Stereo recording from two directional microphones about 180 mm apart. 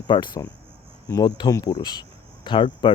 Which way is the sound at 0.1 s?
25° left (ahead or behind).